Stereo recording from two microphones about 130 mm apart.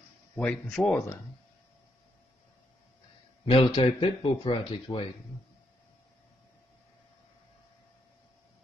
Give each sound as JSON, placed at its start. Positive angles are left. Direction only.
{"t": 0.4, "sound": "speech", "side_deg": 10}
{"t": 3.4, "sound": "speech", "side_deg": 45}